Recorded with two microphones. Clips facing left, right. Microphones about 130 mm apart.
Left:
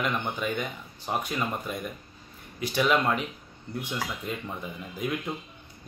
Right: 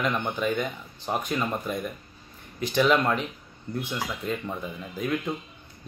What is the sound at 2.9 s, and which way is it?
Speech, 5° left (ahead or behind).